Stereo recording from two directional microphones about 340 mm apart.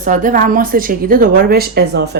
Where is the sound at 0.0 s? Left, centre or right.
Right.